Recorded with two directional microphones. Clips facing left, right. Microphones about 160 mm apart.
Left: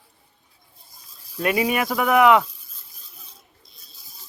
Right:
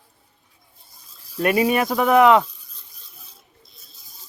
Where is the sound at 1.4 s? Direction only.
35° right (ahead or behind).